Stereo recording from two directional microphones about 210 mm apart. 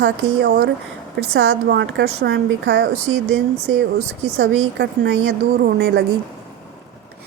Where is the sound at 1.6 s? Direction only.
55° right (ahead or behind).